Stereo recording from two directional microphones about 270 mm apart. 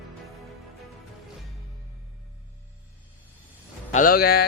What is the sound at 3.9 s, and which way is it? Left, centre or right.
Speech, left.